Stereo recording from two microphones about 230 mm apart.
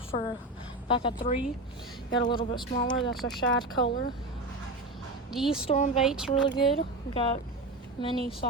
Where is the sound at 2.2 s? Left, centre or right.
Centre.